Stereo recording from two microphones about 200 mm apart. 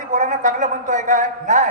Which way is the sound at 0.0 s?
40° right (ahead or behind).